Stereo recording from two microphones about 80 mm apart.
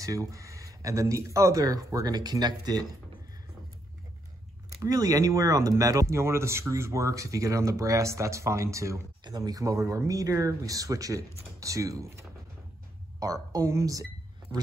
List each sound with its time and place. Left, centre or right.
0.0 s speech: right
4.8 s speech: right
9.2 s speech: right